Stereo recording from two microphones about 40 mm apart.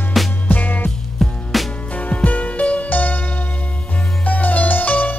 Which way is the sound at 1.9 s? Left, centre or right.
Left.